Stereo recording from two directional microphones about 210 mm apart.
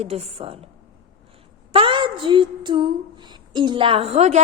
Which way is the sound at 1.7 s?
25° right (ahead or behind).